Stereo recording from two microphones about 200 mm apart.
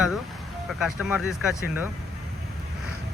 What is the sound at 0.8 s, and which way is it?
Speech, centre (ahead or behind).